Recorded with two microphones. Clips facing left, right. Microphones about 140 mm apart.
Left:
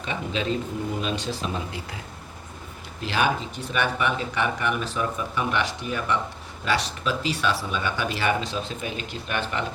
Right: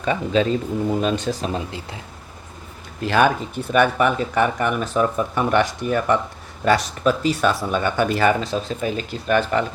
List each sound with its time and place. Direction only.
0.0 s speech: 45° right (ahead or behind)
3.0 s speech: 50° right (ahead or behind)